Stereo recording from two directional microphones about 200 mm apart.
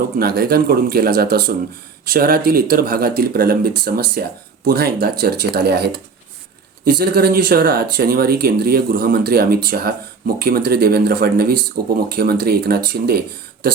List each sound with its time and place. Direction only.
0.2 s speech: 50° right (ahead or behind)